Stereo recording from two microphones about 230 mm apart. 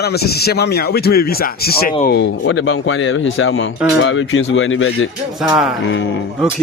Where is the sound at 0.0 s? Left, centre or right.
Left.